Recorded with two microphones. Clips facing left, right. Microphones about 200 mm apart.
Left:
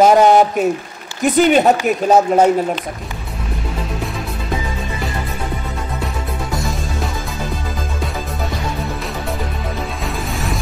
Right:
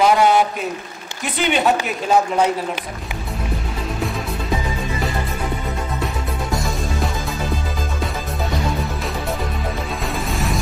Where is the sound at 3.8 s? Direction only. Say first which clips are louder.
Right 2 dB; centre (ahead or behind).